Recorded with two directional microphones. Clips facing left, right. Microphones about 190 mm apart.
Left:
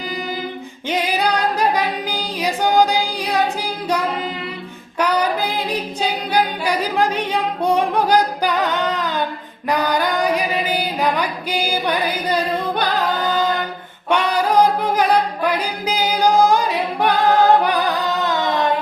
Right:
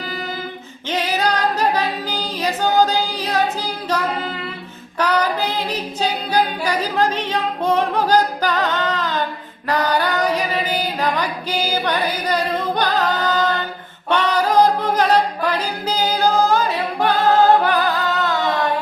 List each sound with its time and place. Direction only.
0.9 s a capella: 15° left (ahead or behind)
4.9 s singing: 10° left (ahead or behind)
9.6 s music: 15° left (ahead or behind)
14.1 s a capella: 10° left (ahead or behind)